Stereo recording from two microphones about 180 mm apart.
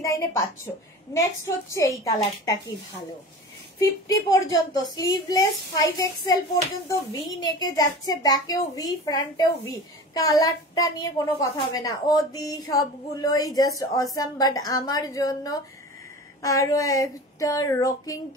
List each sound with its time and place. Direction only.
0.0 s a woman's voice: 15° left (ahead or behind)
1.4 s a woman's voice: 15° left (ahead or behind)
3.8 s a woman's voice: 20° left (ahead or behind)